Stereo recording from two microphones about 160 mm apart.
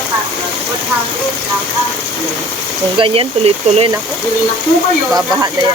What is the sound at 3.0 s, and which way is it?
Speech, 35° right (ahead or behind).